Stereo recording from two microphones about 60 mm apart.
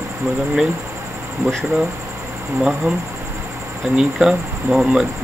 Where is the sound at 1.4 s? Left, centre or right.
Right.